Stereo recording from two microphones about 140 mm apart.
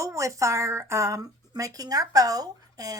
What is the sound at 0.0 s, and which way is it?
A woman's voice, 20° right (ahead or behind).